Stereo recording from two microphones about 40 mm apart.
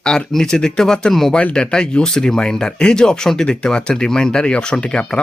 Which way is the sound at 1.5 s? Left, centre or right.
Left.